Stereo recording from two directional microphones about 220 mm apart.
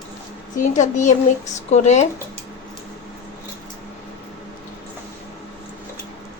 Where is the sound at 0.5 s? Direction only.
35° left (ahead or behind).